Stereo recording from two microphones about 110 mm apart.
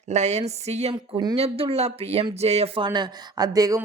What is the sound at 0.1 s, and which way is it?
Speech, 90° right.